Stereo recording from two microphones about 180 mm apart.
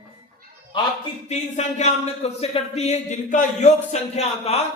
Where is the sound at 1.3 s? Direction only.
40° left (ahead or behind).